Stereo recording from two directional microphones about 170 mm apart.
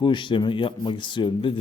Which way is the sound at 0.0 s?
25° left (ahead or behind).